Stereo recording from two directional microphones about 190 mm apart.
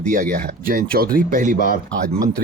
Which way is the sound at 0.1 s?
45° right (ahead or behind).